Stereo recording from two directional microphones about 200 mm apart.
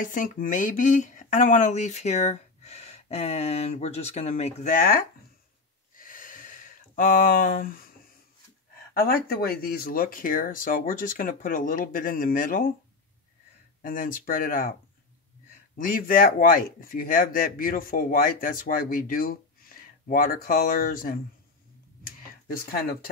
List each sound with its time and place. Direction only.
0.0 s speech: 40° left (ahead or behind)
5.9 s a sound: 45° left (ahead or behind)
8.9 s speech: 50° left (ahead or behind)
13.8 s speech: 45° left (ahead or behind)
15.8 s speech: 45° left (ahead or behind)
22.0 s a sound: 45° left (ahead or behind)